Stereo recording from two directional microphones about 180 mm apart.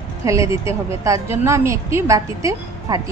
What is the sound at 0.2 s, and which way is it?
A woman's voice, 15° right (ahead or behind).